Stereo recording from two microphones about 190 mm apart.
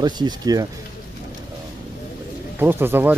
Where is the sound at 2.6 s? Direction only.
10° right (ahead or behind).